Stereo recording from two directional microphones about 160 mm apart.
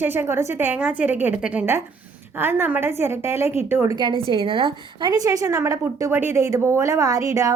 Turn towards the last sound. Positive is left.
turn(degrees=-20)  # may be behind; listen again after turning